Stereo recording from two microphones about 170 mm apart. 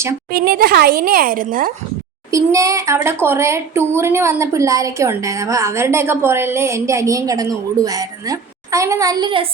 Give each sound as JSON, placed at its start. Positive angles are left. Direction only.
{"t": 0.3, "sound": "a woman's voice", "side_deg": -60}
{"t": 2.3, "sound": "speech", "side_deg": -20}